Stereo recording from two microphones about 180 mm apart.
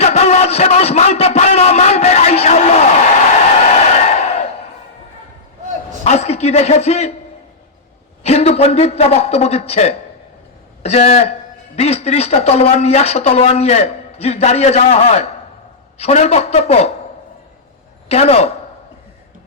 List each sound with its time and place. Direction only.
0.0 s a sound: 35° left (ahead or behind)
6.1 s a man's voice: 35° left (ahead or behind)
8.2 s speech: 35° left (ahead or behind)
18.1 s speech: 35° left (ahead or behind)